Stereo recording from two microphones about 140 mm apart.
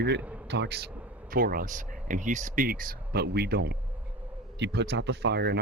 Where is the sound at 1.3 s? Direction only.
90° right.